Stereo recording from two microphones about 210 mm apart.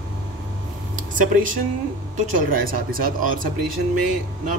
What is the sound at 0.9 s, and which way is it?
Speech, 40° right (ahead or behind).